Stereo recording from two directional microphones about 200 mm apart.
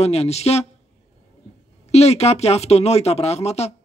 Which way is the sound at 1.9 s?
30° left (ahead or behind).